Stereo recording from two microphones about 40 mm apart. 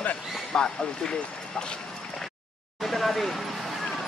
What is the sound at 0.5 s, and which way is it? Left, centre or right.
Speech, centre.